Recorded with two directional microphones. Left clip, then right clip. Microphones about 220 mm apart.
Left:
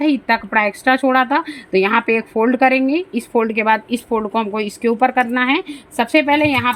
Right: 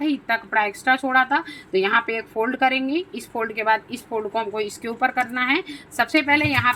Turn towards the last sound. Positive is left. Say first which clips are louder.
# left 4 dB
turn(degrees=35)  # may be behind; listen again after turning